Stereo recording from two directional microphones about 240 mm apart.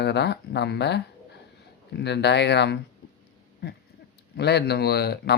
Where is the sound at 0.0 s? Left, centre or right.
Left.